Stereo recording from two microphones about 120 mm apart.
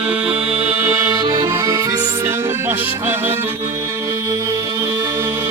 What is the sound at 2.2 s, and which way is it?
Music, 20° right (ahead or behind).